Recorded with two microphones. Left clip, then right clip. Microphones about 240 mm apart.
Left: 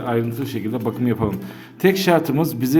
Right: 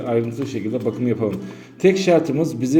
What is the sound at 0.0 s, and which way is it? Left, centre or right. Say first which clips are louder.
A man's voice: right 1 dB; centre.